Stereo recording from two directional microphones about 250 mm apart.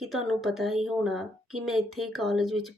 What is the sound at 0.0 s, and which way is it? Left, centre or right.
Speech, centre.